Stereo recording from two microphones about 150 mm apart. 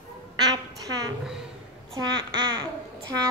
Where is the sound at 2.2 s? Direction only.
30° right (ahead or behind).